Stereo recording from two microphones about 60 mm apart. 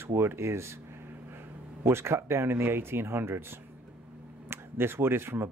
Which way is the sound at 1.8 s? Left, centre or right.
Right.